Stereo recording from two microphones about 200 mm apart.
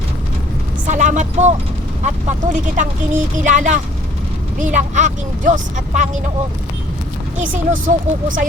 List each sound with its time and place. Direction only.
0.9 s speech: 35° right (ahead or behind)
7.3 s speech: 40° right (ahead or behind)